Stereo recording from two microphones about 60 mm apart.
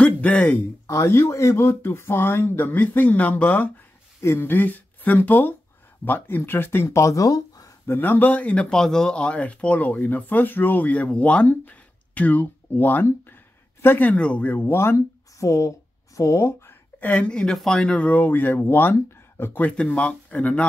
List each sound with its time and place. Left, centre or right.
0.0 s speech: left
0.8 s speech: left
1.1 s speech: left
4.2 s speech: left
7.8 s speech: left
8.6 s speech: centre; by 13.0 s left
13.0 s a sound: left
14.0 s speech: left
14.7 s speech: left
15.0 s speech: left
17.0 s a woman's voice: left
19.6 s speech: left